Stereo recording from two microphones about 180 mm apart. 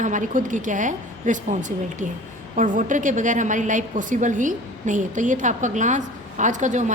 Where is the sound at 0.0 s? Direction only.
45° right (ahead or behind).